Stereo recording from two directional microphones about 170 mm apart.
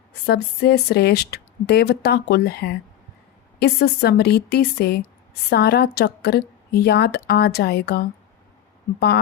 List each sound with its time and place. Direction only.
0.3 s speech: 70° left (ahead or behind)